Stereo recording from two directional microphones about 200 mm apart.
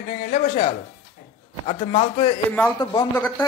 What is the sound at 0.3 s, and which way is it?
Speech, 30° left (ahead or behind).